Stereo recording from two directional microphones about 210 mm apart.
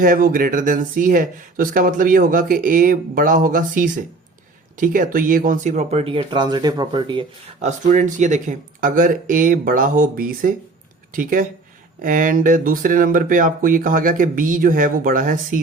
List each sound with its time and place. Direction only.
0.0 s speech: 40° right (ahead or behind); by 7.7 s 25° right (ahead or behind)
7.9 s speech: 35° right (ahead or behind)